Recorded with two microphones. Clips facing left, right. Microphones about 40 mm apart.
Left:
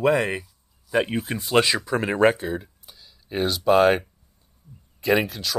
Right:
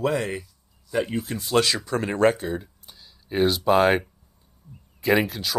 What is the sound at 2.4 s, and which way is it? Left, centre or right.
Speech, centre.